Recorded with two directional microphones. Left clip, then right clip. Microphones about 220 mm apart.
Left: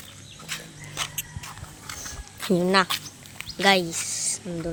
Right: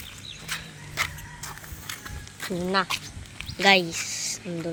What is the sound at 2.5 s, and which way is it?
Speech, 30° left (ahead or behind).